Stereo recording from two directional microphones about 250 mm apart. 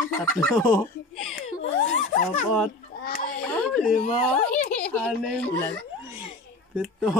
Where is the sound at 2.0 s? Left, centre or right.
Left.